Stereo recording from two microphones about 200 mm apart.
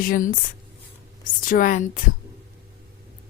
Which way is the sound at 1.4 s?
40° left (ahead or behind).